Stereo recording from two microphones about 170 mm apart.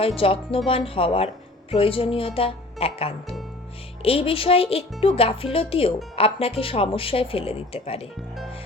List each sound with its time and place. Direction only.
0.2 s speech: 35° left (ahead or behind)